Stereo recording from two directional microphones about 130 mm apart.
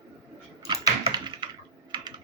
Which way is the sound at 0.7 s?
35° right (ahead or behind).